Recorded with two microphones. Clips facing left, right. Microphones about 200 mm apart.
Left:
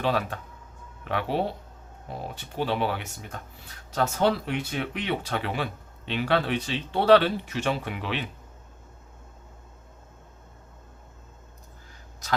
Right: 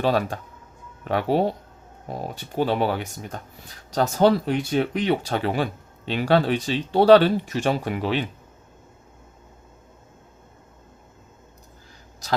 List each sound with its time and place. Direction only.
0.0 s speech: 35° right (ahead or behind)